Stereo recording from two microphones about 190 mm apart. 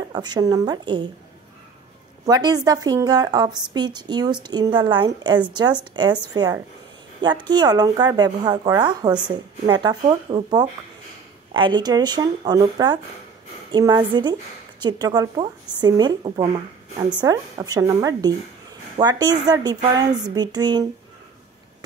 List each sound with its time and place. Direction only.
0.1 s a woman's voice: 20° right (ahead or behind)
2.2 s a woman's voice: 20° right (ahead or behind)